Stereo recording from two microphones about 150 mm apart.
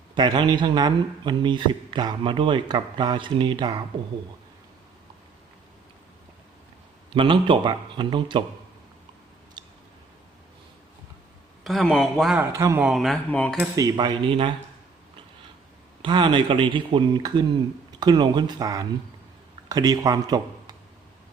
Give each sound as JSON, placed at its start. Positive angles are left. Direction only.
{"t": 0.1, "sound": "speech", "side_deg": -30}
{"t": 7.1, "sound": "speech", "side_deg": -35}
{"t": 9.6, "sound": "a sound", "side_deg": -30}
{"t": 11.6, "sound": "speech", "side_deg": 0}
{"t": 12.4, "sound": "speech", "side_deg": -20}
{"t": 12.8, "sound": "speech", "side_deg": 0}
{"t": 13.7, "sound": "speech", "side_deg": -25}
{"t": 16.0, "sound": "speech", "side_deg": -30}